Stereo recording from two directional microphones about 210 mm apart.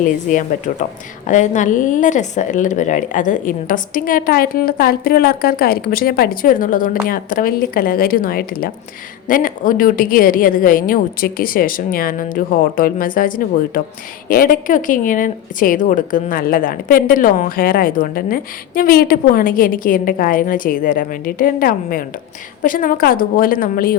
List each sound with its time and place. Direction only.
0.0 s a woman's voice: 40° left (ahead or behind)